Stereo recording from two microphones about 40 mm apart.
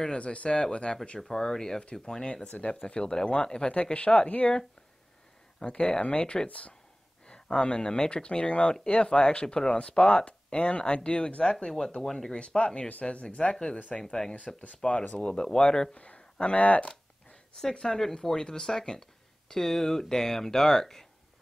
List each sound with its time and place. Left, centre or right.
0.0 s speech: left
1.2 s speech: centre
2.4 s speech: left
2.7 s speech: centre
5.6 s speech: left
7.2 s speech: centre
14.8 s speech: left
16.8 s a sound: centre
17.7 s speech: centre